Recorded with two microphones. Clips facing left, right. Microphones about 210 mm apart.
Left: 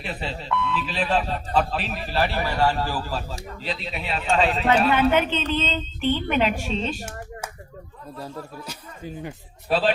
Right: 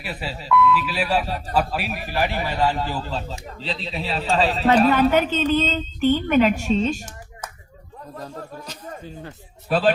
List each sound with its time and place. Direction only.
0.0 s a man's voice: 5° right (ahead or behind); by 4.4 s 35° right (ahead or behind)
4.4 s a man's voice: centre (ahead or behind)
4.6 s speech: 35° right (ahead or behind)
8.2 s speech: 10° left (ahead or behind)
9.6 s speech: 45° right (ahead or behind)